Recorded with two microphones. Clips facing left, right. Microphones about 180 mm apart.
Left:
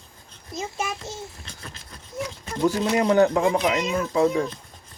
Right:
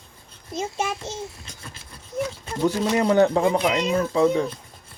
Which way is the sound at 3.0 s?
35° right (ahead or behind).